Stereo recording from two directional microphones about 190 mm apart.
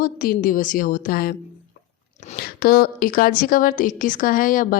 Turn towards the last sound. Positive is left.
turn(degrees=45)  # may be behind; listen again after turning